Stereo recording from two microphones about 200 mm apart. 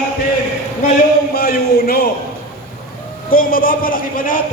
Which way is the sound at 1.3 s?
50° left (ahead or behind).